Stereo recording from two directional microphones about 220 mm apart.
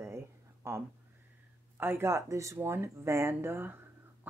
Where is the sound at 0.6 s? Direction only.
10° right (ahead or behind).